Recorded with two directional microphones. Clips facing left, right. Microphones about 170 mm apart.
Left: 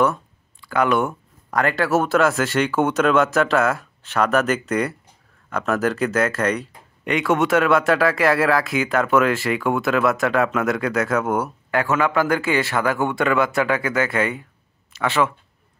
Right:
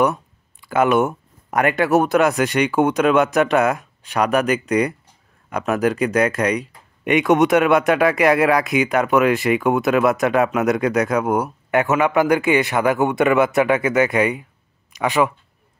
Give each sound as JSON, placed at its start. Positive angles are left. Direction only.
{"t": 0.6, "sound": "speech", "side_deg": -20}